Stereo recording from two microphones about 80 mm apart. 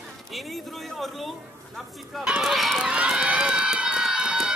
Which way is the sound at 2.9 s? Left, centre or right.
Centre.